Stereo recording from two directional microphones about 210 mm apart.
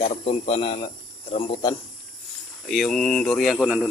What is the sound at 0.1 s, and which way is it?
Speech, 30° left (ahead or behind).